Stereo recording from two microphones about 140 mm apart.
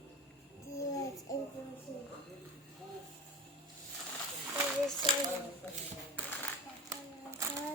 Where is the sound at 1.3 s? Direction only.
25° left (ahead or behind).